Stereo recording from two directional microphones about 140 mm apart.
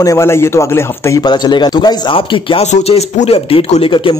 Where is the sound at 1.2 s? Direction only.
30° left (ahead or behind).